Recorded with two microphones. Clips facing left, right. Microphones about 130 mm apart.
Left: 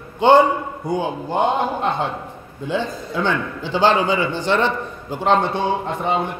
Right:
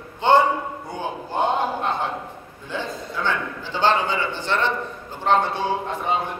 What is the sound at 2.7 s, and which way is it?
A man's voice, 20° left (ahead or behind).